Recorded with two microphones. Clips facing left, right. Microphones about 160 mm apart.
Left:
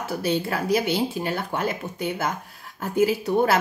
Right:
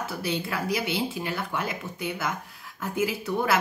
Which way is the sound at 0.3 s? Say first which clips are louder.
Left 6 dB; 40° left (ahead or behind).